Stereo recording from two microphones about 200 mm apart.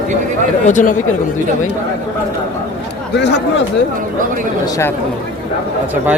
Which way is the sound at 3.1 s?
60° left (ahead or behind).